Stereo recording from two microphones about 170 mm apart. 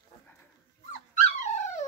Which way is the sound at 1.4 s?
45° left (ahead or behind).